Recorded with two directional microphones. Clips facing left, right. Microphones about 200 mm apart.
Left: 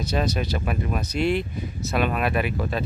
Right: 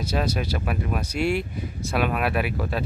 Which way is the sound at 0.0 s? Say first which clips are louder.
Left 1 dB; 10° right (ahead or behind).